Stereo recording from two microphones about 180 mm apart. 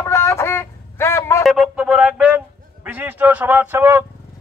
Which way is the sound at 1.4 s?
Centre (ahead or behind).